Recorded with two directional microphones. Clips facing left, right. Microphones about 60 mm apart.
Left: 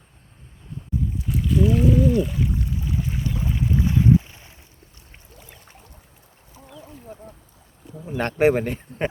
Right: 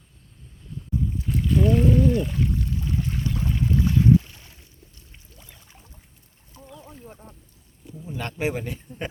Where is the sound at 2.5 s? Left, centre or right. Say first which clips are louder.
Even; centre.